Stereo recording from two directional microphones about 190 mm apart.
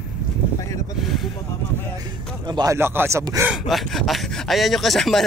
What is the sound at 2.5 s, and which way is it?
Speech, 20° right (ahead or behind).